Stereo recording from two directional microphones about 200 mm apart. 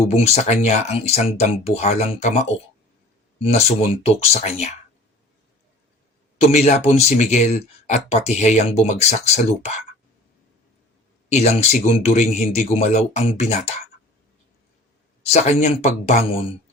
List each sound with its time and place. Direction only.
0.1 s speech: 35° left (ahead or behind)
6.5 s speech: 35° left (ahead or behind)
11.3 s speech: 35° left (ahead or behind)
15.2 s speech: 35° left (ahead or behind)